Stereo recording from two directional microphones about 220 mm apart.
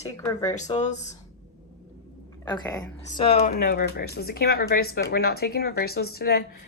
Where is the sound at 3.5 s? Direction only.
45° left (ahead or behind).